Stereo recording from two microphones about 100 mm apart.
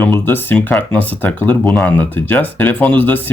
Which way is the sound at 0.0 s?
20° left (ahead or behind).